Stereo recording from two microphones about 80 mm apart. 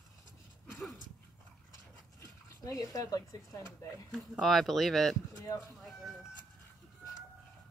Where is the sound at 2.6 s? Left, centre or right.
Left.